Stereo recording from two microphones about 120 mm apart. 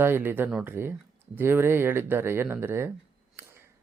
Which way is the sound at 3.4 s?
20° right (ahead or behind).